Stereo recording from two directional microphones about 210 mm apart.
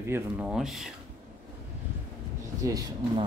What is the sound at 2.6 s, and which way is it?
Speech, 15° right (ahead or behind).